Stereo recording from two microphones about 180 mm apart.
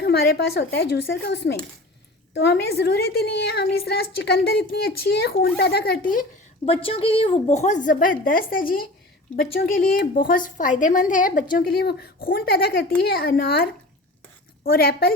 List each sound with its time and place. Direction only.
0.0 s a child's voice: 65° left (ahead or behind); by 6.2 s 50° left (ahead or behind)
6.7 s a woman's voice: 30° left (ahead or behind); by 15.1 s 55° left (ahead or behind)